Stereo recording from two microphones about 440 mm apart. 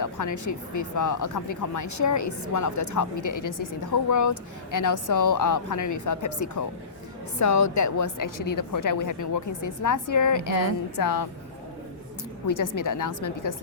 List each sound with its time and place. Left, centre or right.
0.0 s a woman's voice: left
12.5 s a woman's voice: left